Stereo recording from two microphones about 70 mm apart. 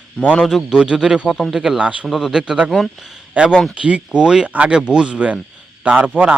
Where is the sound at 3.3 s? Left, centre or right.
Centre.